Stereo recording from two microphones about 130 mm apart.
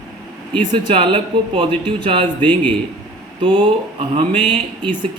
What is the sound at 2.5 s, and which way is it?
Speech, 10° left (ahead or behind).